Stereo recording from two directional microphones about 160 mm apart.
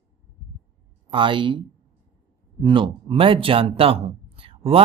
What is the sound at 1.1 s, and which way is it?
Speech, 30° right (ahead or behind).